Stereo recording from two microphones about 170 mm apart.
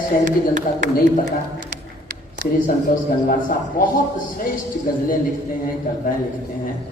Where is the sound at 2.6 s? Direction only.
55° left (ahead or behind).